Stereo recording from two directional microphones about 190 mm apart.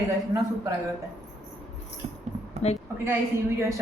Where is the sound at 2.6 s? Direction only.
35° left (ahead or behind).